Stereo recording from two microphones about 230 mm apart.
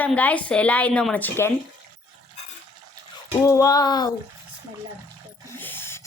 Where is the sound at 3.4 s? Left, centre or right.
Centre.